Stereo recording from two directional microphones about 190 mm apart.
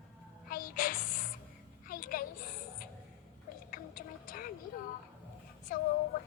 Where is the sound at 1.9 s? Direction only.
50° left (ahead or behind).